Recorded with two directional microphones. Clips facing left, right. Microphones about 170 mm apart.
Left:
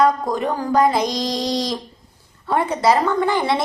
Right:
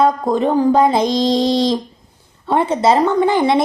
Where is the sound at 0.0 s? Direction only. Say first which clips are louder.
Right 3 dB; 25° right (ahead or behind).